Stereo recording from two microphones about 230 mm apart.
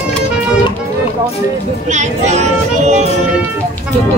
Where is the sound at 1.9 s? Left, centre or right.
Right.